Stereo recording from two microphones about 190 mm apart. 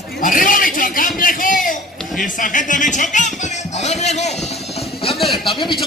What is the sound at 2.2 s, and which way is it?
Music, 45° left (ahead or behind).